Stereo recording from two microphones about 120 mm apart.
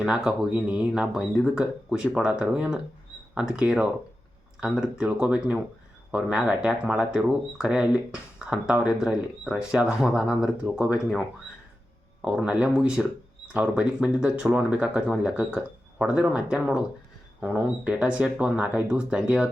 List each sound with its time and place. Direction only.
0.0 s speech: 5° right (ahead or behind)
12.2 s speech: 10° right (ahead or behind)